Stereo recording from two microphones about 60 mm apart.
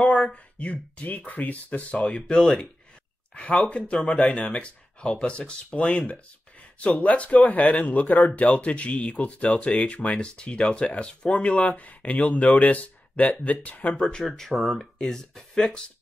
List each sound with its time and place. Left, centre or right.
0.0 s speech: centre